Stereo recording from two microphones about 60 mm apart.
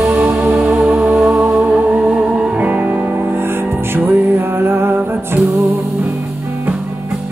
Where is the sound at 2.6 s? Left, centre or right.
Right.